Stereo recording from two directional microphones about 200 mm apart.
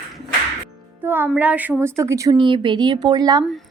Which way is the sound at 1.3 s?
5° right (ahead or behind).